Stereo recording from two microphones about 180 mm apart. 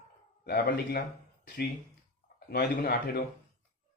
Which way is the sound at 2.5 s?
60° left (ahead or behind).